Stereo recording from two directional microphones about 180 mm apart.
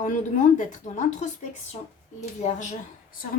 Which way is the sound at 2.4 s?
40° left (ahead or behind).